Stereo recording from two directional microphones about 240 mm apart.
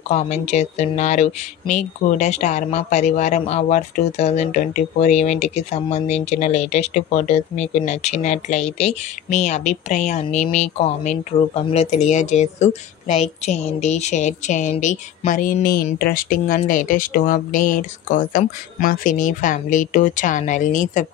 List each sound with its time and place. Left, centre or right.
0.1 s speech: left